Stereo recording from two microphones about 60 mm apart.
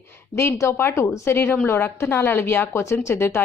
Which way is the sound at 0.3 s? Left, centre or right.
Left.